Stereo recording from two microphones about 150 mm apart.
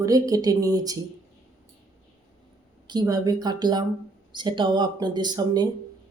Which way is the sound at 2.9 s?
25° right (ahead or behind).